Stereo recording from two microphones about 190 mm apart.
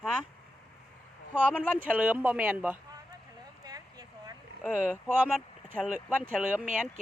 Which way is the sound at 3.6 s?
20° right (ahead or behind).